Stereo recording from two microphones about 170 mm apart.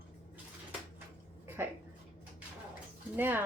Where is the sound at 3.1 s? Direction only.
10° right (ahead or behind).